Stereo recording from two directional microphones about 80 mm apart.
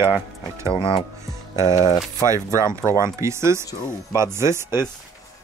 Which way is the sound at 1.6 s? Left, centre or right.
Left.